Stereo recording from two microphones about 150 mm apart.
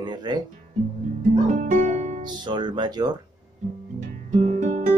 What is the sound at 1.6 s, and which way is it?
Music, 60° right (ahead or behind).